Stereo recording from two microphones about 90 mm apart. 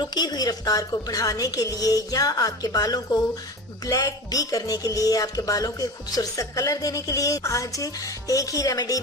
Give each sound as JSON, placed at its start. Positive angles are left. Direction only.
{"t": 0.0, "sound": "a woman's voice", "side_deg": 50}